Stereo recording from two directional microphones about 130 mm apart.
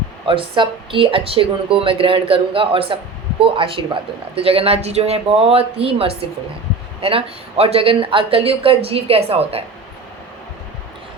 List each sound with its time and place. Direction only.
0.3 s speech: 40° right (ahead or behind)